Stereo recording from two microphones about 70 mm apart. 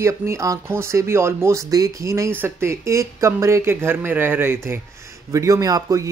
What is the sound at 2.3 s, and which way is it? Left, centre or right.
Speech, right.